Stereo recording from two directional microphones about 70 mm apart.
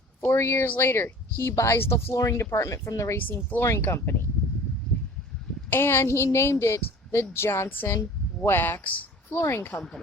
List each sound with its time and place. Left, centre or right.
0.3 s a woman's voice: left
3.2 s speech: left
3.6 s a woman's voice: left
5.7 s a woman's voice: left
9.4 s a woman's voice: left